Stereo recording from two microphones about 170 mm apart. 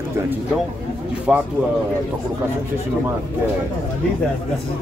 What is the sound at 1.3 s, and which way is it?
Speech, 5° right (ahead or behind).